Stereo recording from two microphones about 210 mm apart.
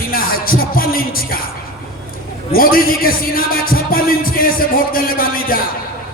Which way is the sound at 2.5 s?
45° left (ahead or behind).